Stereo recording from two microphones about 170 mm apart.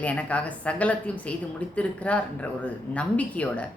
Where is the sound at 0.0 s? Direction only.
10° left (ahead or behind).